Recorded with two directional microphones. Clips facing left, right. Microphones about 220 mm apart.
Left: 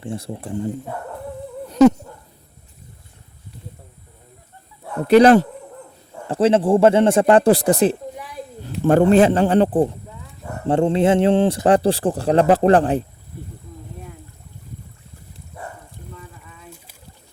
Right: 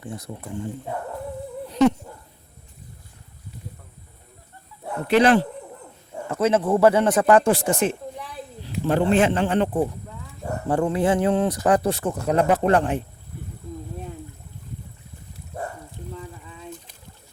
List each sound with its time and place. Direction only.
0.0 s speech: 30° left (ahead or behind)
5.0 s speech: 40° left (ahead or behind)
8.8 s speech: 45° left (ahead or behind)
16.5 s boat: 25° right (ahead or behind)